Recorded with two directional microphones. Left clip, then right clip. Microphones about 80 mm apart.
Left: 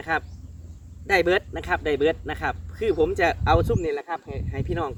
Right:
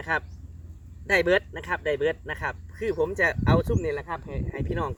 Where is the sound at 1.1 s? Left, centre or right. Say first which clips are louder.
Left 1 dB; left.